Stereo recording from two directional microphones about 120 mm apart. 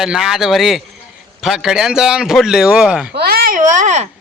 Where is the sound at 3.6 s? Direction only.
90° right.